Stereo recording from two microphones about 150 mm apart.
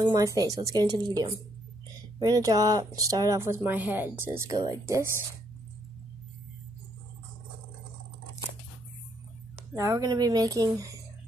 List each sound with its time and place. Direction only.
0.0 s speech: 25° right (ahead or behind)
9.8 s speech: 20° right (ahead or behind)